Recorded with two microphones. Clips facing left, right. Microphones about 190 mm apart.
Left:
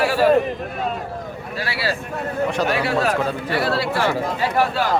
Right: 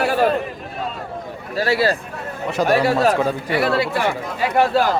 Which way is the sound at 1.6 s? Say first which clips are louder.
Right 8 dB; 45° right (ahead or behind).